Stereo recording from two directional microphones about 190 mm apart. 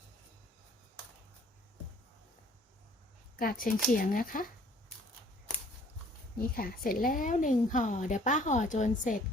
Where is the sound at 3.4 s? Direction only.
45° left (ahead or behind).